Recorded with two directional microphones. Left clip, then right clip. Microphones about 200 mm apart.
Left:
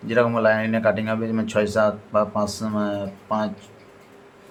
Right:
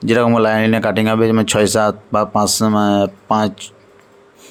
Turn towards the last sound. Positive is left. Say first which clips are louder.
# right 8 dB
turn(degrees=-55)  # may be behind; listen again after turning